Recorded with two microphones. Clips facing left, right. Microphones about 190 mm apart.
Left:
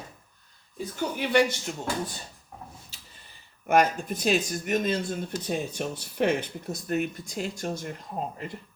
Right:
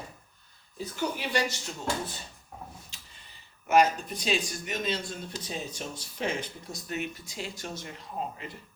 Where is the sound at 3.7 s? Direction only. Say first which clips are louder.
Left 1 dB; 55° left (ahead or behind).